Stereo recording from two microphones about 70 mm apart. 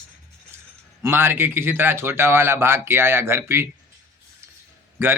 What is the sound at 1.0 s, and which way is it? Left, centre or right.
Speech, right.